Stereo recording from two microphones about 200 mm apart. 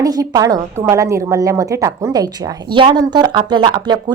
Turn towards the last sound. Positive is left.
turn(degrees=-20)  # may be behind; listen again after turning